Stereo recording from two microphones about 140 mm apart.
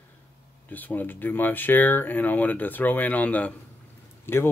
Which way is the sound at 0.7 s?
15° left (ahead or behind).